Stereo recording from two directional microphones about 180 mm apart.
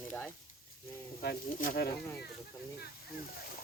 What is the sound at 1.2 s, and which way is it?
Speech, 55° left (ahead or behind).